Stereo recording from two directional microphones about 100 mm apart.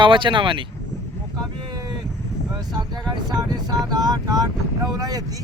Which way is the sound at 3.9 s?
40° right (ahead or behind).